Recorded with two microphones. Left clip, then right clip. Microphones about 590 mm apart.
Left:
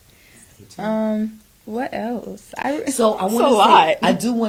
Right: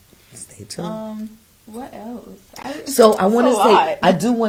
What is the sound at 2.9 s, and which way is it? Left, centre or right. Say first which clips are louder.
Speech: right 7 dB; right.